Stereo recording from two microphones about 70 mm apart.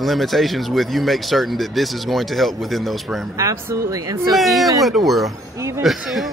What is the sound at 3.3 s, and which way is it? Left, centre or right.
Speech, right.